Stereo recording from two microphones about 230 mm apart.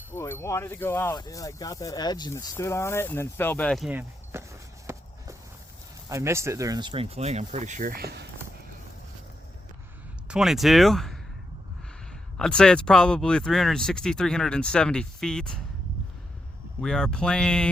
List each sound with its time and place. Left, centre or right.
0.1 s speech: centre
4.9 s walk: centre
6.1 s speech: centre; by 8.3 s right
10.2 s speech: centre
12.4 s speech: centre
16.8 s speech: centre